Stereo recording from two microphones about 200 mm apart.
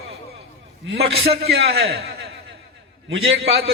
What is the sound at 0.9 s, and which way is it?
A man's voice, 55° right (ahead or behind).